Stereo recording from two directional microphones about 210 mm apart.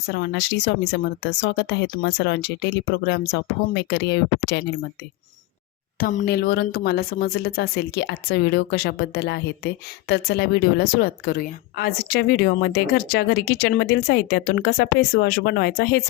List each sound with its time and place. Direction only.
0.1 s speech: 50° left (ahead or behind)
6.0 s speech: 40° left (ahead or behind)